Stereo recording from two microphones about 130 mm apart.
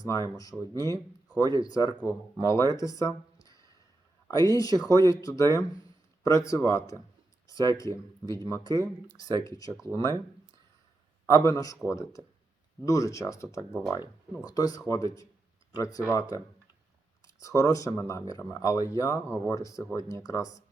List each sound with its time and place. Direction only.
0.0 s speech: 25° left (ahead or behind)
2.7 s a sound: 25° left (ahead or behind)
4.3 s speech: 30° left (ahead or behind)
11.3 s speech: 30° left (ahead or behind)